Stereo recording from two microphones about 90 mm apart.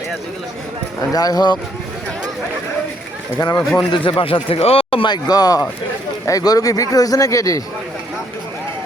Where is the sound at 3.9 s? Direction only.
75° left (ahead or behind); by 5.1 s 90° left.